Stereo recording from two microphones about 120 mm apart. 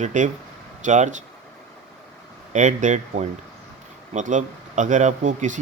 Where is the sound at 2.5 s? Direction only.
90° right.